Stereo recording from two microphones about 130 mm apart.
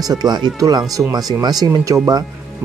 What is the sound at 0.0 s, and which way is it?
Speech, 30° right (ahead or behind).